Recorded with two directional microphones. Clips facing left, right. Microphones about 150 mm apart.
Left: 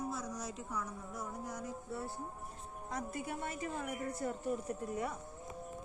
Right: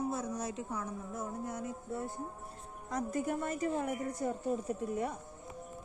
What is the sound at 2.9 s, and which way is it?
A woman's voice, 45° right (ahead or behind).